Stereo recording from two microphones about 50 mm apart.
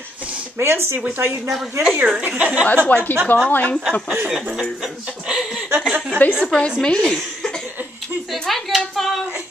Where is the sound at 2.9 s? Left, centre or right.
Left.